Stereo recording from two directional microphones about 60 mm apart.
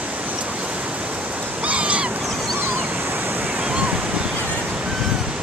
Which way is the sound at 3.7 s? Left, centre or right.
Right.